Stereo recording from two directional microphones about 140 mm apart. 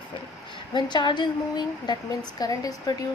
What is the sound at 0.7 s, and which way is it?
A woman's voice, 30° left (ahead or behind).